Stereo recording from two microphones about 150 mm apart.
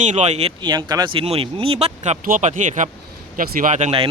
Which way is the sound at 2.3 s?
60° right (ahead or behind).